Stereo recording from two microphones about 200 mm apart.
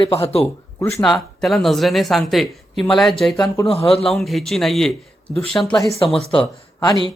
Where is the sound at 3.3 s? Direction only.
20° left (ahead or behind).